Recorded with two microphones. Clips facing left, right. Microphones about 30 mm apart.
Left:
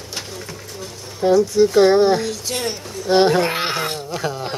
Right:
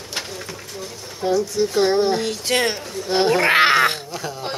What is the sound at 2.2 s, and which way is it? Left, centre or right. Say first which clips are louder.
Speech: right 4 dB; right.